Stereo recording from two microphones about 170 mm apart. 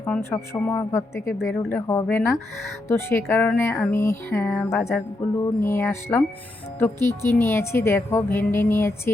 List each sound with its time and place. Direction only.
0.0 s a woman's voice: 15° left (ahead or behind)